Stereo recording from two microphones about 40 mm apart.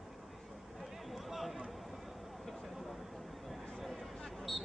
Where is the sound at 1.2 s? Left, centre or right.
Centre.